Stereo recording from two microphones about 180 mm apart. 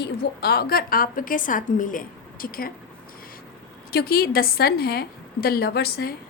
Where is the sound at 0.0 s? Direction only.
60° left (ahead or behind).